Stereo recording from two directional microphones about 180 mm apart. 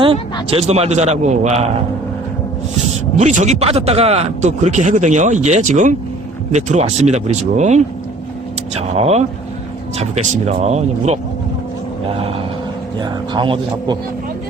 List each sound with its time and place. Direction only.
0.5 s speech: 35° right (ahead or behind)
3.2 s speech: 40° right (ahead or behind)
12.1 s a sound: 30° right (ahead or behind)
13.0 s speech: 25° right (ahead or behind)